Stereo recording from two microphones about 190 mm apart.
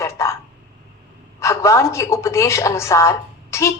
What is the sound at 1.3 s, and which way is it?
A woman's voice, 15° left (ahead or behind).